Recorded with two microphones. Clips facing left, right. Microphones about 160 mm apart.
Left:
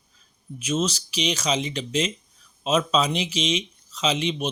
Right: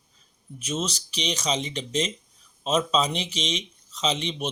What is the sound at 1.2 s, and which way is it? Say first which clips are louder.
Speech: left 3 dB; 35° right (ahead or behind).